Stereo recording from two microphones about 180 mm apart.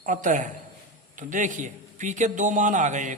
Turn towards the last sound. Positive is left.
turn(degrees=-45)  # may be behind; listen again after turning